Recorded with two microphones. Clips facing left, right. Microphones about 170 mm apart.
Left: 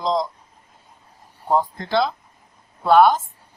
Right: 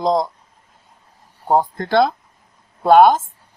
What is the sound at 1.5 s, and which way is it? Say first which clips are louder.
Speech: right 4 dB; 50° right (ahead or behind).